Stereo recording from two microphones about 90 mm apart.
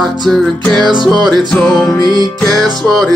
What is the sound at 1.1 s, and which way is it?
Music, centre (ahead or behind).